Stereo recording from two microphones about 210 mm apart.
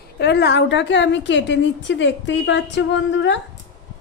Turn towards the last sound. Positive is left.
turn(degrees=60)  # may be behind; listen again after turning